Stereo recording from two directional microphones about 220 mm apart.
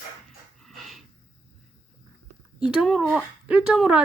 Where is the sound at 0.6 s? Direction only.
Centre (ahead or behind).